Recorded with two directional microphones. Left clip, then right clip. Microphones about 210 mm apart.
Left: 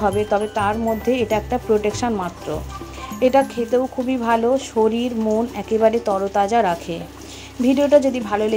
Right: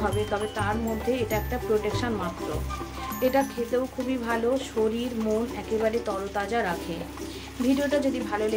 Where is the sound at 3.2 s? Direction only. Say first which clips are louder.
Left 8 dB; 35° left (ahead or behind).